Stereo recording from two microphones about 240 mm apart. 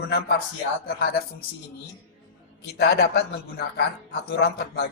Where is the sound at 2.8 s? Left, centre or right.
Left.